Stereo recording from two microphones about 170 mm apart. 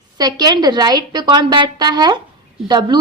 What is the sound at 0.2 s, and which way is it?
A woman's voice, 25° right (ahead or behind).